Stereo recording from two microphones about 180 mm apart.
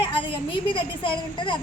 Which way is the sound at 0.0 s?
30° left (ahead or behind).